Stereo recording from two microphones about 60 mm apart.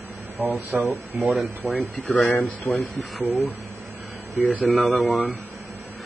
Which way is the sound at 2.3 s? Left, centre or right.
Left.